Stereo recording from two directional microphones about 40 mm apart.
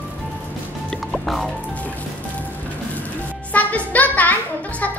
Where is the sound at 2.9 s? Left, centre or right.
Left.